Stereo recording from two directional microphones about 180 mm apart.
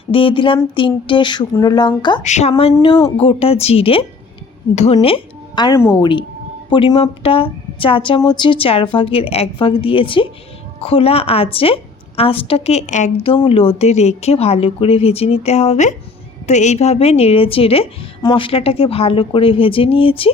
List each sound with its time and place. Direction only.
0.1 s a woman's voice: 30° left (ahead or behind)
2.2 s a woman's voice: 40° left (ahead or behind); by 6.1 s 15° left (ahead or behind)
6.7 s a woman's voice: 25° left (ahead or behind)